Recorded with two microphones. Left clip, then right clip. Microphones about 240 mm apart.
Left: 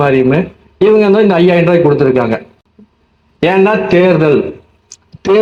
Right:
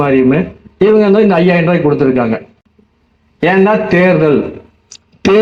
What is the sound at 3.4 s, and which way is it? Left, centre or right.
A man's voice, left.